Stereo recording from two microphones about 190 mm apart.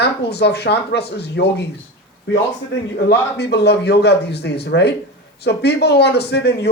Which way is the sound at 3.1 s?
60° left (ahead or behind).